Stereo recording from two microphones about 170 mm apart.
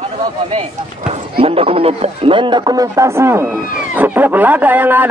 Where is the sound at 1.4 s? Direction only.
35° right (ahead or behind).